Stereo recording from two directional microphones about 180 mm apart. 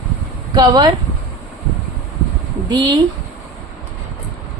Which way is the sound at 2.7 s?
25° right (ahead or behind).